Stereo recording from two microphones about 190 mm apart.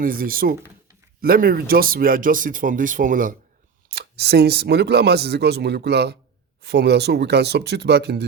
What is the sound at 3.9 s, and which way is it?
Speech, 60° right (ahead or behind).